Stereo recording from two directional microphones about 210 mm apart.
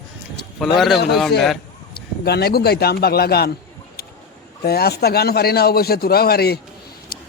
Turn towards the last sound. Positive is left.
turn(degrees=45)  # may be behind; listen again after turning